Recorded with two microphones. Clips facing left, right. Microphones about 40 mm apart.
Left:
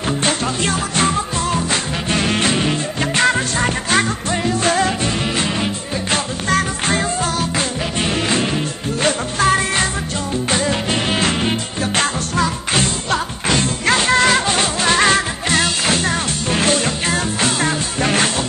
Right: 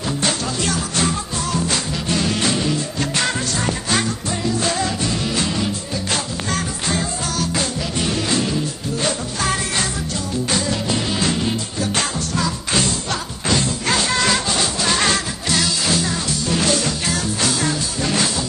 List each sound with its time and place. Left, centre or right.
0.2 s music: left
6.1 s music: left